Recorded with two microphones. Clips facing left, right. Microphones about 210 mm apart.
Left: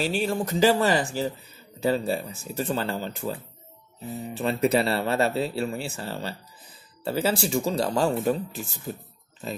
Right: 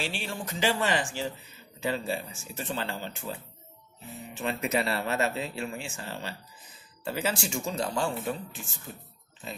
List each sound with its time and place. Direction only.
0.0 s speech: 40° left (ahead or behind)
4.4 s speech: 35° left (ahead or behind)